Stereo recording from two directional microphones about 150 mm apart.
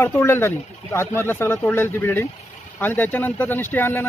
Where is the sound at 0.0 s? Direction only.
15° left (ahead or behind).